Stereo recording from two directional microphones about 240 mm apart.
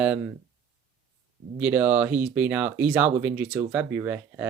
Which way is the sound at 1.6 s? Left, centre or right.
Centre.